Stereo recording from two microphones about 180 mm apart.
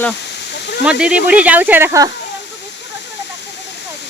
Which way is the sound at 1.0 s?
5° right (ahead or behind).